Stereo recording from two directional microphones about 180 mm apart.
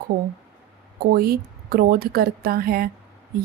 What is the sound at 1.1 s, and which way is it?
Speech, 55° right (ahead or behind).